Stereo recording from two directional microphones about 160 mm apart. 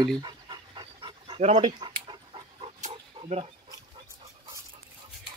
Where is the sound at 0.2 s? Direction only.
30° right (ahead or behind).